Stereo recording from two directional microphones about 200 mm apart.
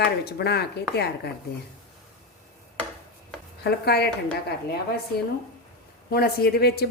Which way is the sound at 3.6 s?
55° left (ahead or behind).